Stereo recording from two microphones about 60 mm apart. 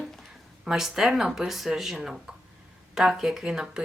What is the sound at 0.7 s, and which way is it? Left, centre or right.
Speech, centre.